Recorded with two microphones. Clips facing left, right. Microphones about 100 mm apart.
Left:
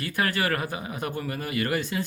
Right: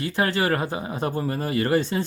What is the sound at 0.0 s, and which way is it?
Speech, 25° right (ahead or behind).